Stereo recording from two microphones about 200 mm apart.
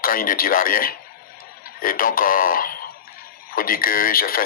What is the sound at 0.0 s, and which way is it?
A man's voice, 45° left (ahead or behind).